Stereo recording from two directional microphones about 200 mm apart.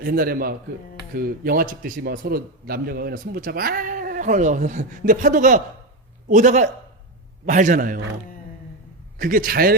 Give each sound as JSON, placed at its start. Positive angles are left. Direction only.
{"t": 0.0, "sound": "a man's voice", "side_deg": -45}
{"t": 9.1, "sound": "a man's voice", "side_deg": -45}